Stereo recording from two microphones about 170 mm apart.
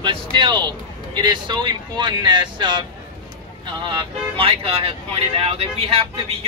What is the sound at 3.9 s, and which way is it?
Speech, 30° right (ahead or behind).